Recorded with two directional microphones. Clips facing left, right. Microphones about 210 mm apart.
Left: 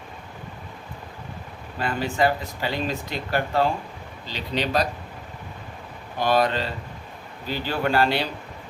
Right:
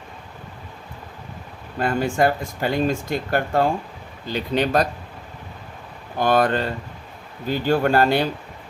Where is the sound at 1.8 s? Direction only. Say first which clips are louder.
Right 4 dB; 50° right (ahead or behind).